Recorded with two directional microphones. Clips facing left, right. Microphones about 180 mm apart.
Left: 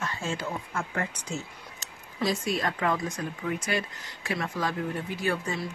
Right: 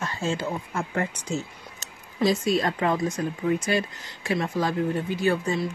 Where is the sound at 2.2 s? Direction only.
25° right (ahead or behind).